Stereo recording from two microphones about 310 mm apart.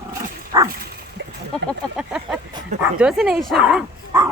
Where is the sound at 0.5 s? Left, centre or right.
Centre.